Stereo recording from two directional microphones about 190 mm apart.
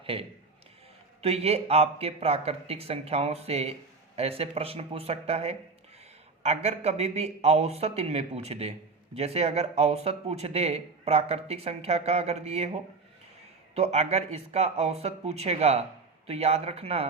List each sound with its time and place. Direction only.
0.0 s a man's voice: 30° right (ahead or behind)